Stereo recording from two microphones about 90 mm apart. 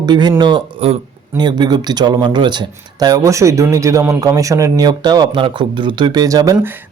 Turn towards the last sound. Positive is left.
turn(degrees=-40)  # may be behind; listen again after turning